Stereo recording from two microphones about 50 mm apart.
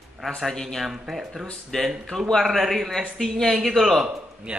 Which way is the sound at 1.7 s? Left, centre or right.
Centre.